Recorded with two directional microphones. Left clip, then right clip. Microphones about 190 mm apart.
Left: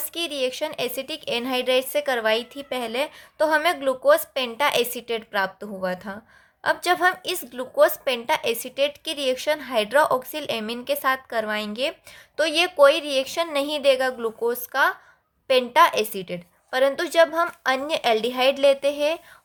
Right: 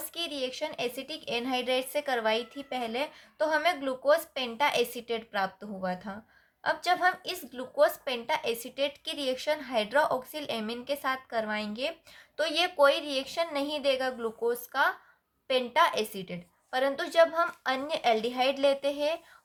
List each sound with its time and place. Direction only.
0.1 s a woman's voice: 35° left (ahead or behind)